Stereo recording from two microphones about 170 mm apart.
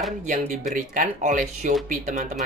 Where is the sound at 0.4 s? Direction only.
45° right (ahead or behind).